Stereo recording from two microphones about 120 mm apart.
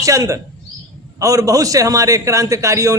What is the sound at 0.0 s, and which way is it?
A man's voice, 25° right (ahead or behind).